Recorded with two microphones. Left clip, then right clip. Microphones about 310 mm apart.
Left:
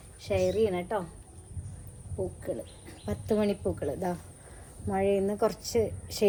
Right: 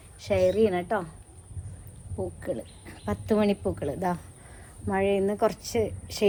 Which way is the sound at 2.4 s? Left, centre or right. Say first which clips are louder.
Right 3 dB; right.